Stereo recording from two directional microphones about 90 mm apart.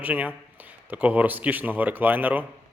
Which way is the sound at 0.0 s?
20° right (ahead or behind).